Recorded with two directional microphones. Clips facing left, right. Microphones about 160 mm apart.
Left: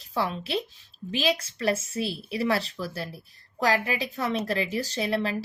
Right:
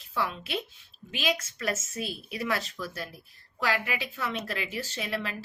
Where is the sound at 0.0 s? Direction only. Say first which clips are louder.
Left 3 dB; 35° left (ahead or behind).